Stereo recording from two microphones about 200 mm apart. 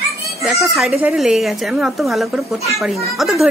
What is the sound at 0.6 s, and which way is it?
Speech, centre (ahead or behind).